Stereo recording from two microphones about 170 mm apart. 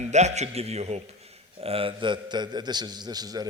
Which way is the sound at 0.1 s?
40° right (ahead or behind).